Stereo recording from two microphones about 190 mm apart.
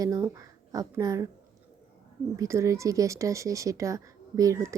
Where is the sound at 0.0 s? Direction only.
15° right (ahead or behind).